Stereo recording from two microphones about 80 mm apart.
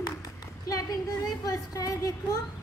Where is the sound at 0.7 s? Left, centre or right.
Left.